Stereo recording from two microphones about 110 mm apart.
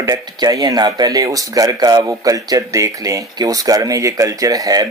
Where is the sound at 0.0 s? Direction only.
35° right (ahead or behind).